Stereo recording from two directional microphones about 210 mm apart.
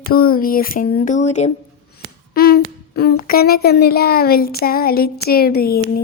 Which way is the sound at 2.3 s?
45° left (ahead or behind).